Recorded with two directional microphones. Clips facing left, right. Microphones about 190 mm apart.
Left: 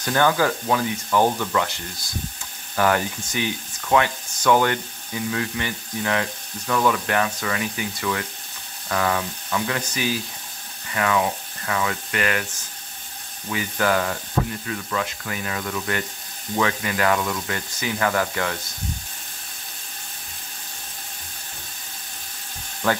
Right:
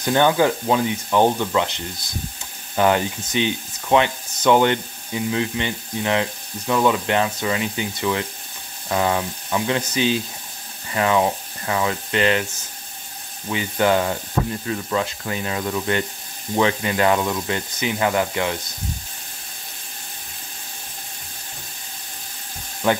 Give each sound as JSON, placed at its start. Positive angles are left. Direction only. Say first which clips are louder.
{"t": 0.0, "sound": "speech", "louder": "right 3 dB", "side_deg": -20}
{"t": 13.5, "sound": "speech", "louder": "right 3 dB", "side_deg": -20}
{"t": 22.8, "sound": "speech", "louder": "right 3 dB", "side_deg": -20}